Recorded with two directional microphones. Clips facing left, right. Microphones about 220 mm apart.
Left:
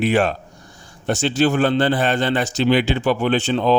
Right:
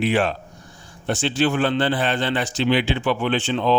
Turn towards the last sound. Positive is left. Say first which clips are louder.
# left 3 dB
turn(degrees=40)  # may be behind; listen again after turning